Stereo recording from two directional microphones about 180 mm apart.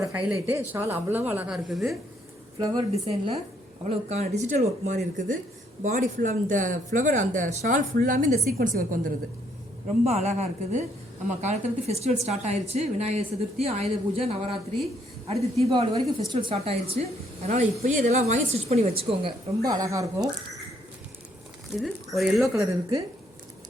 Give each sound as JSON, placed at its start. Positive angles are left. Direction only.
{"t": 0.7, "sound": "a woman's voice", "side_deg": -10}
{"t": 2.6, "sound": "a woman's voice", "side_deg": -20}
{"t": 2.9, "sound": "a woman's voice", "side_deg": -35}
{"t": 17.0, "sound": "a woman's voice", "side_deg": -45}
{"t": 21.8, "sound": "speech", "side_deg": 0}
{"t": 22.5, "sound": "a woman's voice", "side_deg": -20}